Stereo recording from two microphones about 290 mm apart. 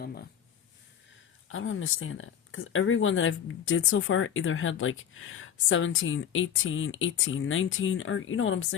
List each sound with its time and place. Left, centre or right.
0.0 s speech: left
1.5 s speech: left